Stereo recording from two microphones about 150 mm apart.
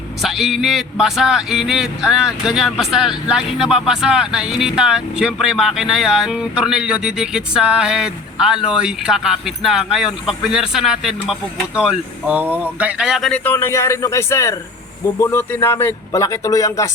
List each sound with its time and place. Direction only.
0.2 s speech: centre (ahead or behind); by 16.9 s 20° left (ahead or behind)